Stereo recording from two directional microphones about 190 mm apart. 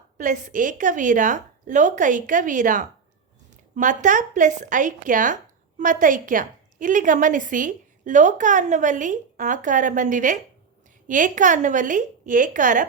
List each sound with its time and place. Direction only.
0.2 s speech: 40° right (ahead or behind)